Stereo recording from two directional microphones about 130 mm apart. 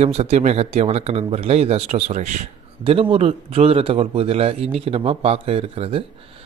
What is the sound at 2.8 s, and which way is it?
Speech, 45° right (ahead or behind).